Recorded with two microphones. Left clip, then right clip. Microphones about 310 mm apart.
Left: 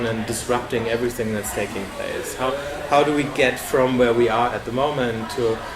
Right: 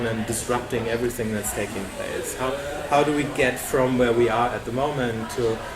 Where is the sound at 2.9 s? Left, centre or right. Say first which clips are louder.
Left 3 dB; centre.